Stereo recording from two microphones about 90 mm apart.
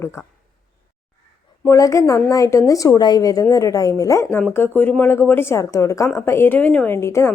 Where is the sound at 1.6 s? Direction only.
35° left (ahead or behind).